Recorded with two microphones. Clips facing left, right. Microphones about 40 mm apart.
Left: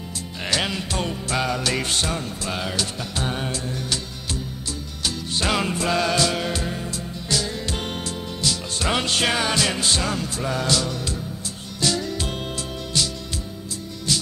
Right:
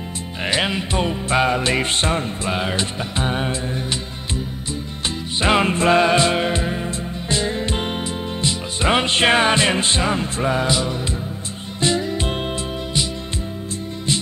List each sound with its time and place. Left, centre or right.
0.5 s music: right
5.0 s music: right